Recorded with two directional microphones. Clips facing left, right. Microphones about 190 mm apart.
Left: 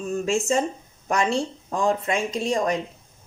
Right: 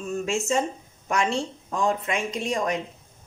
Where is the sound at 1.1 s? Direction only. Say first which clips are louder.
Left 2 dB; 35° left (ahead or behind).